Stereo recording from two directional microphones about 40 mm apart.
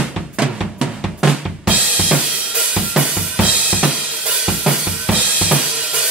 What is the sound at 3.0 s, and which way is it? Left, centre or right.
Drum kit, right.